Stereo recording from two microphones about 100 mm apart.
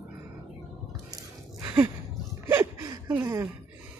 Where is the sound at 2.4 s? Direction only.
25° right (ahead or behind).